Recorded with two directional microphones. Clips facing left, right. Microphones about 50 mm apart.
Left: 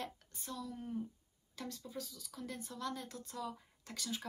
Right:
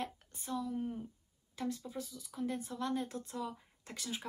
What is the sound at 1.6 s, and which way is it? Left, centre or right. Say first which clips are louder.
Speech: right 6 dB; right.